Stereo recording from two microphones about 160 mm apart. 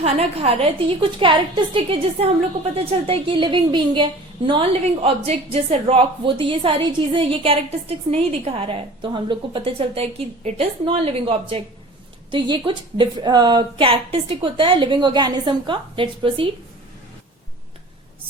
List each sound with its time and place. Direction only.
0.0 s a woman's voice: 40° right (ahead or behind)